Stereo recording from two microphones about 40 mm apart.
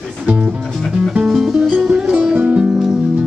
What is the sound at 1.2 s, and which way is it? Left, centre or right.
Music, centre.